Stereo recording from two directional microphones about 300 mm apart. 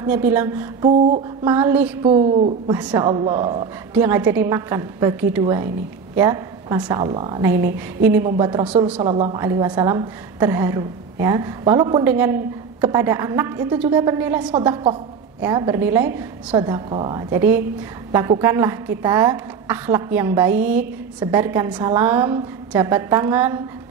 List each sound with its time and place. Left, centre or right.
0.0 s a woman's voice: centre
2.0 s a woman's voice: right; by 9.0 s centre
9.0 s a woman's voice: centre